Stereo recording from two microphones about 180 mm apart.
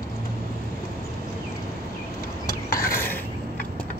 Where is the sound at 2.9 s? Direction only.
10° left (ahead or behind).